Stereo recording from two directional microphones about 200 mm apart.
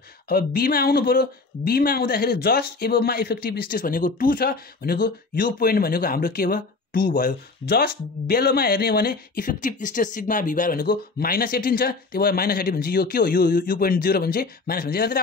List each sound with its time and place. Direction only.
0.3 s speech: 50° left (ahead or behind)